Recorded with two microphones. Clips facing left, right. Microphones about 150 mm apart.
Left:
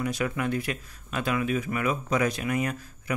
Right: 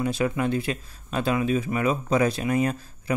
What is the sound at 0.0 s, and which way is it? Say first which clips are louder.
Speech: right 4 dB; 30° right (ahead or behind).